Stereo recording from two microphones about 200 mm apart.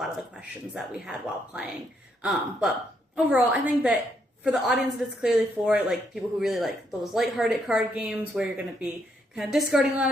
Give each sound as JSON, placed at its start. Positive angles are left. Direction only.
{"t": 0.7, "sound": "speech", "side_deg": -5}